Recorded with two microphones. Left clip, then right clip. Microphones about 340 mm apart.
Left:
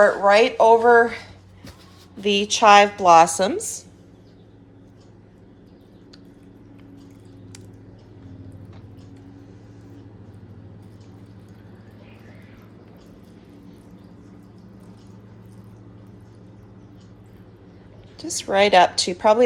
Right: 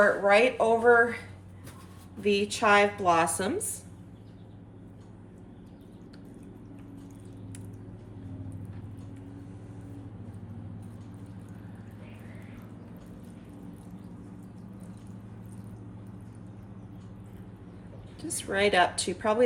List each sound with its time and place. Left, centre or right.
0.3 s speech: left
2.2 s a woman's voice: centre
18.2 s a sound: centre
18.5 s a woman's voice: centre